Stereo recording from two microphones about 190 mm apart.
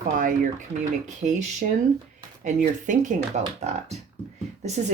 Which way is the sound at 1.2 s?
45° right (ahead or behind).